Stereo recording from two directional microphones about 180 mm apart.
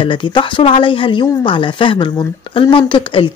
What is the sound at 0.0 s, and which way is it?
Speech, 25° left (ahead or behind).